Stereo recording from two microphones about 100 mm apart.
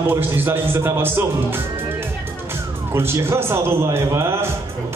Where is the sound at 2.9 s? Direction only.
25° right (ahead or behind).